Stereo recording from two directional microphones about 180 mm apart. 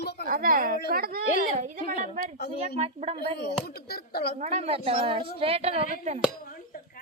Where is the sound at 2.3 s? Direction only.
65° left (ahead or behind).